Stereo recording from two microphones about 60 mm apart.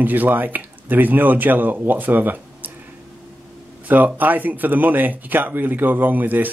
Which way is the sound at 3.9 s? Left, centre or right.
Right.